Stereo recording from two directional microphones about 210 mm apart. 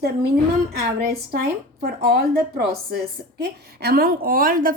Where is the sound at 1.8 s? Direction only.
50° right (ahead or behind).